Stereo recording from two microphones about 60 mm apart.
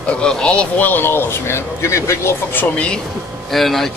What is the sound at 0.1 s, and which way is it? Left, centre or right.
Speech, centre.